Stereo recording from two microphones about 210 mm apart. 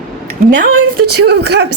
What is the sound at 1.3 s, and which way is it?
Speech, 55° right (ahead or behind).